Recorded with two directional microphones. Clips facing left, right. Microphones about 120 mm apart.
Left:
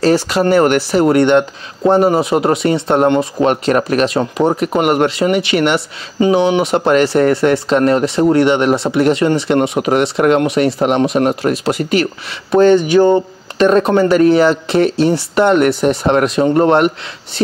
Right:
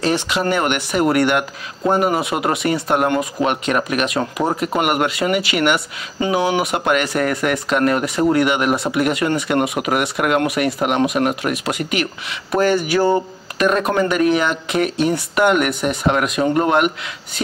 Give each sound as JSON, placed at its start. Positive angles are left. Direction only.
{"t": 0.0, "sound": "speech", "side_deg": 35}